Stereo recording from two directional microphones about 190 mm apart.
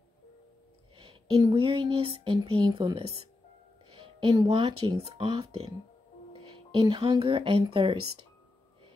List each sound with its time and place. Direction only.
0.9 s a woman's voice: 25° right (ahead or behind)
6.8 s speech: 25° right (ahead or behind)